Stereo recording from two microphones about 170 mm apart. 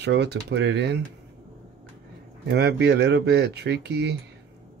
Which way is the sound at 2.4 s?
80° right.